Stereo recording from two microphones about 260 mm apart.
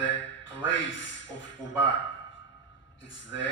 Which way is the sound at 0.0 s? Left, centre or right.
Left.